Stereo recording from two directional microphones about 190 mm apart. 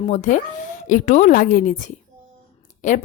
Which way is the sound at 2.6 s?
40° left (ahead or behind).